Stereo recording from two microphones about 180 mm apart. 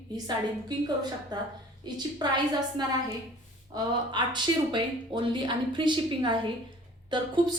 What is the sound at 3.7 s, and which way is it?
A woman's voice, 20° right (ahead or behind).